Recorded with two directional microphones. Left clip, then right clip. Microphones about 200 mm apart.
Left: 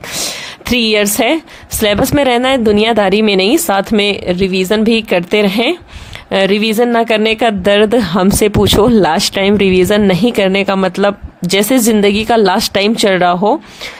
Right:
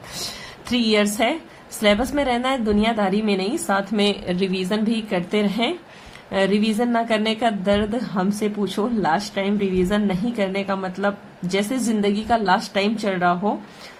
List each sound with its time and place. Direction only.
0.7 s a woman's voice: 45° left (ahead or behind)